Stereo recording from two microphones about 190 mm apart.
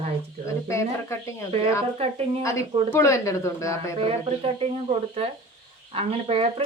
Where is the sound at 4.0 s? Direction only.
30° right (ahead or behind).